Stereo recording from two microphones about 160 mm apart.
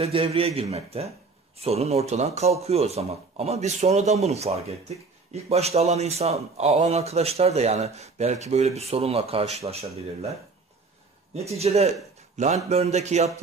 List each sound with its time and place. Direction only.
0.0 s speech: 35° right (ahead or behind)
11.3 s speech: 40° right (ahead or behind)